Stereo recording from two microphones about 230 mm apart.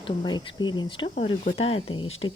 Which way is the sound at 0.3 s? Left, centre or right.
Centre.